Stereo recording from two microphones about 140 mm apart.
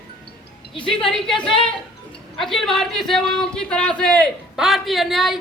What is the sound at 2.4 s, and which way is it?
A man's voice, centre (ahead or behind).